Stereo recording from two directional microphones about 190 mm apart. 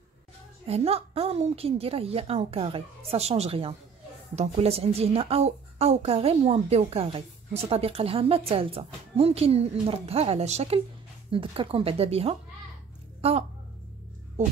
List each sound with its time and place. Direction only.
0.7 s a woman's voice: 30° right (ahead or behind)